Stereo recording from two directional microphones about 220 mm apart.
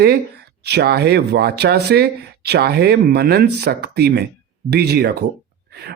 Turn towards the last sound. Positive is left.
turn(degrees=-45)  # may be behind; listen again after turning